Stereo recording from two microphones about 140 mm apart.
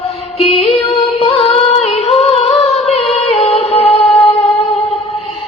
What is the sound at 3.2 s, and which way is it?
Music, 50° left (ahead or behind).